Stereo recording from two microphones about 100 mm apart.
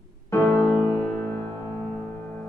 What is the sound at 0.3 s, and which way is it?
Music, 25° left (ahead or behind).